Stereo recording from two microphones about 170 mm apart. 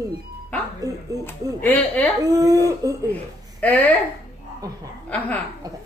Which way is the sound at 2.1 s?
20° right (ahead or behind).